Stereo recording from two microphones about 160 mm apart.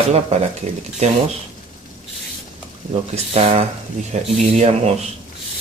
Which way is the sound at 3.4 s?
45° right (ahead or behind).